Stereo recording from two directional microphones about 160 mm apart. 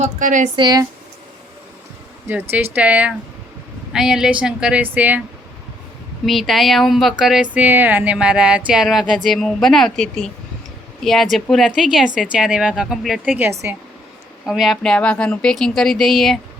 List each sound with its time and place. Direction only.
0.0 s a woman's voice: 50° right (ahead or behind)
0.5 s speech: 25° right (ahead or behind)
2.2 s a woman's voice: 10° right (ahead or behind)
6.2 s speech: centre (ahead or behind)
14.4 s speech: centre (ahead or behind)